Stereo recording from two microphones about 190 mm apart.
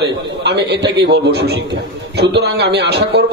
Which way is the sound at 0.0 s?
65° right (ahead or behind).